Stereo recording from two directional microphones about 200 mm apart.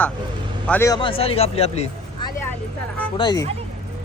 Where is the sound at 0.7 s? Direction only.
15° left (ahead or behind); by 1.7 s 30° left (ahead or behind).